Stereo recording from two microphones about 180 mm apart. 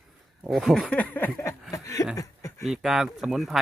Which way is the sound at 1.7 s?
20° left (ahead or behind).